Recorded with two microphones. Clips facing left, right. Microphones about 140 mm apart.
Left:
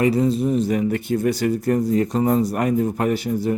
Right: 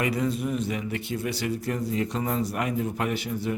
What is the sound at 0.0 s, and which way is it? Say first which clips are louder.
Speech: left 8 dB; 30° left (ahead or behind).